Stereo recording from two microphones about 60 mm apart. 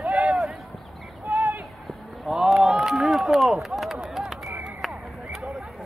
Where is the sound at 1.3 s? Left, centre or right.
Right.